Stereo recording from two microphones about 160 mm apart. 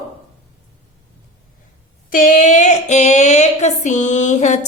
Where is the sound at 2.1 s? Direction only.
55° left (ahead or behind).